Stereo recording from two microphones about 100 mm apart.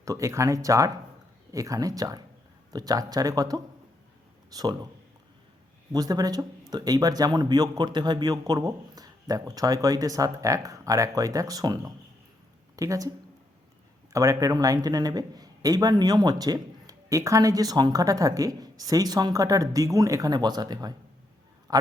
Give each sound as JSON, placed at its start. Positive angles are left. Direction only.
{"t": 0.0, "sound": "a man's voice", "side_deg": -30}
{"t": 5.9, "sound": "a man's voice", "side_deg": -40}